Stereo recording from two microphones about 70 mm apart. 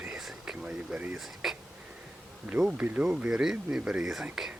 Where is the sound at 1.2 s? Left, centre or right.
Centre.